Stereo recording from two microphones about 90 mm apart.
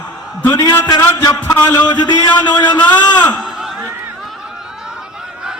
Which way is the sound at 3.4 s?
5° right (ahead or behind).